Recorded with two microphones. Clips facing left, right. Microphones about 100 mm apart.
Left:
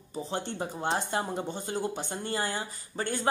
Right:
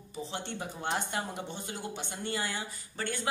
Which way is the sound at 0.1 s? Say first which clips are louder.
Left 4 dB; 35° left (ahead or behind).